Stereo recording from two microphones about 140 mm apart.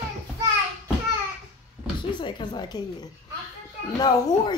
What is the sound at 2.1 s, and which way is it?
A woman's voice, 35° left (ahead or behind).